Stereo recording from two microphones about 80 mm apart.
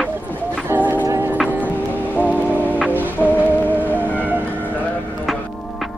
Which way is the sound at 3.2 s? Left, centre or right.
Left.